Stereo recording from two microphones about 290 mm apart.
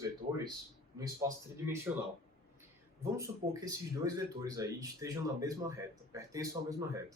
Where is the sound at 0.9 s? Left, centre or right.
Centre.